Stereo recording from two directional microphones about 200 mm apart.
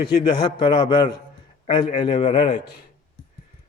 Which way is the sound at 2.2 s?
35° left (ahead or behind).